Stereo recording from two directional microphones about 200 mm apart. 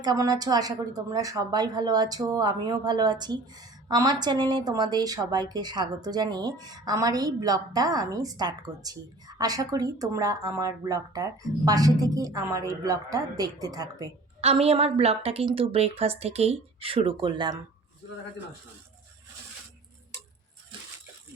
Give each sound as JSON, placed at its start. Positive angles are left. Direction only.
{"t": 0.0, "sound": "a woman's voice", "side_deg": -20}
{"t": 14.4, "sound": "a woman's voice", "side_deg": -30}